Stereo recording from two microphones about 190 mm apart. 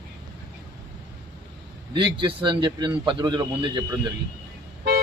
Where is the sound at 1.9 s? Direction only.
25° right (ahead or behind).